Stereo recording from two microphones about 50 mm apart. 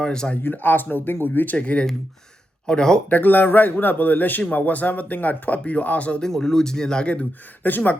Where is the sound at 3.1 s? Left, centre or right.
Left.